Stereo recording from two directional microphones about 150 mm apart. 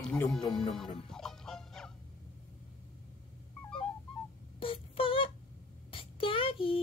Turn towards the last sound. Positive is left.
turn(degrees=35)  # may be behind; listen again after turning